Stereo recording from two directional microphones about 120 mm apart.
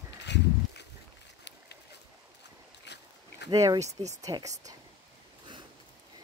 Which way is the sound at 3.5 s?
30° right (ahead or behind).